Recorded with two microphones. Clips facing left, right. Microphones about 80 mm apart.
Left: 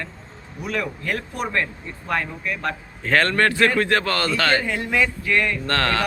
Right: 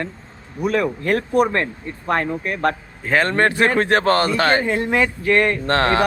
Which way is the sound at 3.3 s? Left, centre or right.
Right.